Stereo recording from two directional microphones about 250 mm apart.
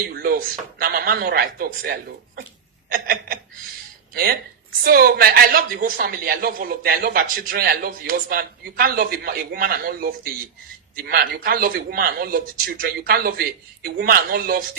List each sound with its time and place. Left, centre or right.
0.1 s a woman's voice: right